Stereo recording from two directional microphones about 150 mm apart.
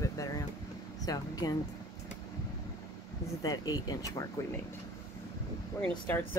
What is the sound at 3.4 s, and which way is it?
Speech, 25° left (ahead or behind).